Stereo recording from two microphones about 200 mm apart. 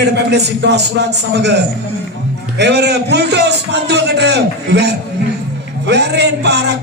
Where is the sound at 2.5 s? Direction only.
55° right (ahead or behind).